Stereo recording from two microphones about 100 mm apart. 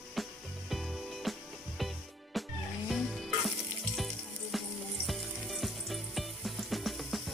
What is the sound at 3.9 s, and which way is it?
Water, centre (ahead or behind).